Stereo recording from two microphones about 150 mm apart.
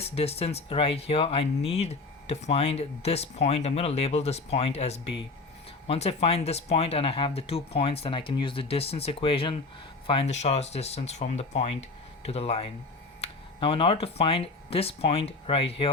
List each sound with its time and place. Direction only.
0.0 s speech: 40° left (ahead or behind)